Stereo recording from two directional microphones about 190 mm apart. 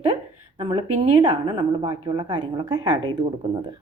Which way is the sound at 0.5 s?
30° right (ahead or behind).